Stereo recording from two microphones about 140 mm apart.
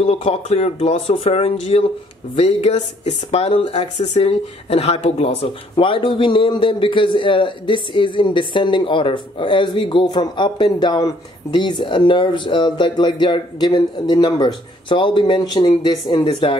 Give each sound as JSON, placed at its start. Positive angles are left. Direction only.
{"t": 0.0, "sound": "speech", "side_deg": 45}
{"t": 4.3, "sound": "speech", "side_deg": 45}